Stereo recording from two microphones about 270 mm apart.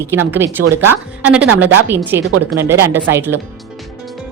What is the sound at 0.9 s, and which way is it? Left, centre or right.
A woman's voice, centre.